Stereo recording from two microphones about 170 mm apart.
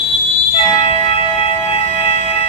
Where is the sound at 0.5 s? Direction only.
35° left (ahead or behind).